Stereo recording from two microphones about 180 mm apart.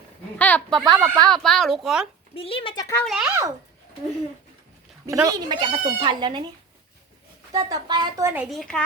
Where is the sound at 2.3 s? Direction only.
30° left (ahead or behind).